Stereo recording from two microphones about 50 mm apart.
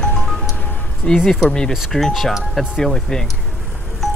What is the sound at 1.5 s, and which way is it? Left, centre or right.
Speech, centre.